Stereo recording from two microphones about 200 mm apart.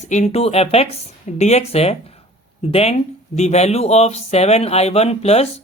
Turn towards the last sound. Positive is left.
turn(degrees=30)  # may be behind; listen again after turning